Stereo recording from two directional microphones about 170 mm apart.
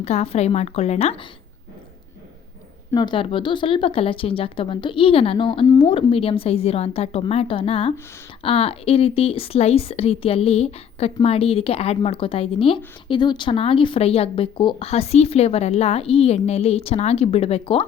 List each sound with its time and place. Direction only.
0.0 s speech: 40° left (ahead or behind)
2.9 s speech: 25° left (ahead or behind)
5.6 s speech: 20° left (ahead or behind)
5.9 s speech: 35° left (ahead or behind)